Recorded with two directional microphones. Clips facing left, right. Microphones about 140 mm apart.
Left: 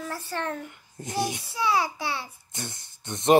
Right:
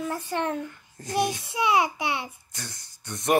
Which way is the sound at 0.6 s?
20° left (ahead or behind).